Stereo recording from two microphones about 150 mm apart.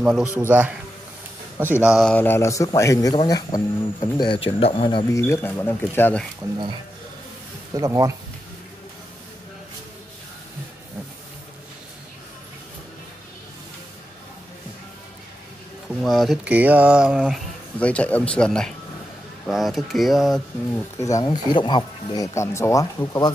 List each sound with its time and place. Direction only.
0.0 s speech: 5° right (ahead or behind)
0.4 s mantra: 10° right (ahead or behind)
1.6 s a man's voice: 10° right (ahead or behind); by 5.0 s 35° left (ahead or behind)
5.1 s a man's voice: 15° left (ahead or behind)
7.7 s speech: 20° right (ahead or behind)
16.0 s speech: centre (ahead or behind)
16.4 s mantra: 10° right (ahead or behind)
17.7 s a man's voice: 10° left (ahead or behind)
21.0 s speech: 25° left (ahead or behind)